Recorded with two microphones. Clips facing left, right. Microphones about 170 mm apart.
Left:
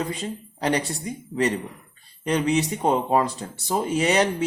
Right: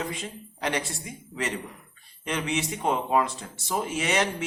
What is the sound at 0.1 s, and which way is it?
Speech, 35° left (ahead or behind).